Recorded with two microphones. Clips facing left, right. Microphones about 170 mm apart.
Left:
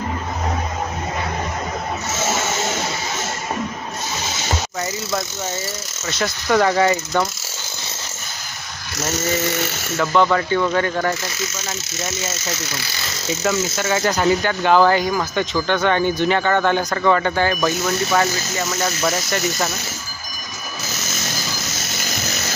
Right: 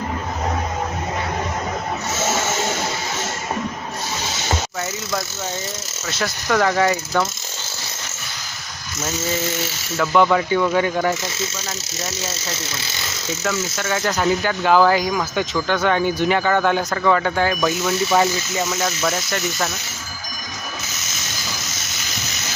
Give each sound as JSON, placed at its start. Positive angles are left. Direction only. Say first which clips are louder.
{"t": 6.1, "sound": "speech", "louder": "left 2 dB", "side_deg": 0}
{"t": 9.1, "sound": "a sound", "louder": "left 2 dB", "side_deg": 75}
{"t": 10.0, "sound": "speech", "louder": "right 1 dB", "side_deg": 0}
{"t": 12.0, "sound": "speech", "louder": "left 2 dB", "side_deg": -35}
{"t": 13.7, "sound": "speech", "louder": "left 2 dB", "side_deg": 5}
{"t": 18.8, "sound": "speech", "louder": "left 1 dB", "side_deg": 5}